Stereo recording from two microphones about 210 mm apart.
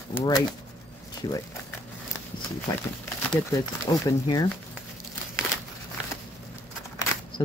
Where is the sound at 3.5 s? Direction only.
15° left (ahead or behind).